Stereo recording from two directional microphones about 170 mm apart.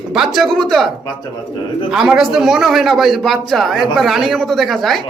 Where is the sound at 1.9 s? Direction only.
5° right (ahead or behind).